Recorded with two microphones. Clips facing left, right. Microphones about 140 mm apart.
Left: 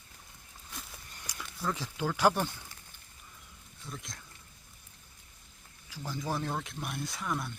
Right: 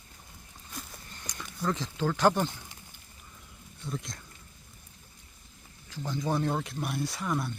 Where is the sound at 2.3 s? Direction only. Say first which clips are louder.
Right 3 dB; 15° right (ahead or behind).